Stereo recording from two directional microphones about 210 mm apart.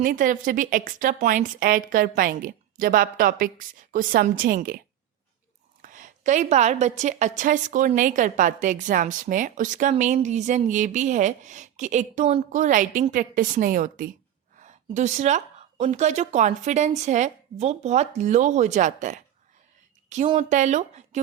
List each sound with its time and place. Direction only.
0.0 s a woman's voice: 40° right (ahead or behind)
5.8 s a woman's voice: 35° right (ahead or behind)
20.3 s a woman's voice: 35° right (ahead or behind)